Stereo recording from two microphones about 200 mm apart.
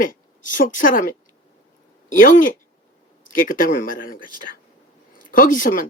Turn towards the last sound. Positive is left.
turn(degrees=40)  # may be behind; listen again after turning